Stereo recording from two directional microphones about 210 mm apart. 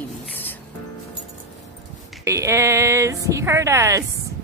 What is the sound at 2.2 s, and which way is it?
Speech, 15° right (ahead or behind).